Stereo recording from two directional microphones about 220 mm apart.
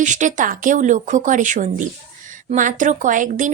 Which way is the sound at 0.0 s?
35° right (ahead or behind).